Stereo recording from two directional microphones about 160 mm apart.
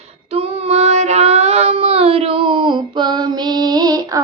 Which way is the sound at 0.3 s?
40° right (ahead or behind).